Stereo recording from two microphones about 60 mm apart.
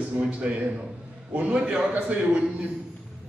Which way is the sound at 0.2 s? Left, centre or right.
Right.